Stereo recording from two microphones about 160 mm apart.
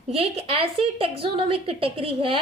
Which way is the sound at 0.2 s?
40° right (ahead or behind).